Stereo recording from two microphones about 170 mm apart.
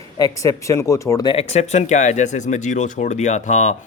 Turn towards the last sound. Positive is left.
turn(degrees=45)  # may be behind; listen again after turning